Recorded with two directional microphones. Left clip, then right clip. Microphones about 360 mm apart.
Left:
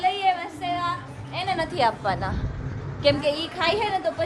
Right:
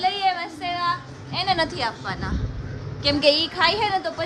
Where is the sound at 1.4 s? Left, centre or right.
Centre.